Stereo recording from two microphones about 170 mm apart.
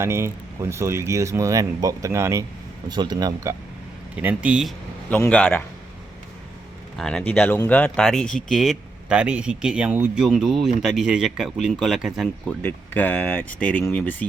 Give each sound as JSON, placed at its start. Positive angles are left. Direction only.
{"t": 0.0, "sound": "speech", "side_deg": -15}
{"t": 4.1, "sound": "speech", "side_deg": -10}
{"t": 5.0, "sound": "speech", "side_deg": 10}
{"t": 6.9, "sound": "speech", "side_deg": 5}
{"t": 12.6, "sound": "speech", "side_deg": 10}